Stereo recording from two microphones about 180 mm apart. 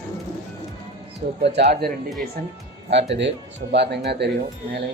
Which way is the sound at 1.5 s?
65° right (ahead or behind).